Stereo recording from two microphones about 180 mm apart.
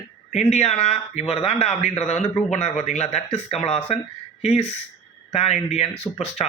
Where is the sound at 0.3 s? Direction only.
40° left (ahead or behind).